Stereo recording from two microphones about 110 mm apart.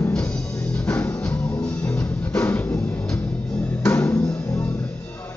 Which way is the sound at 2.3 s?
20° left (ahead or behind).